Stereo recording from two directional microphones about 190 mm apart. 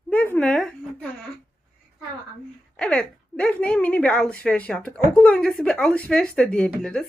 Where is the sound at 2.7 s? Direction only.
5° left (ahead or behind).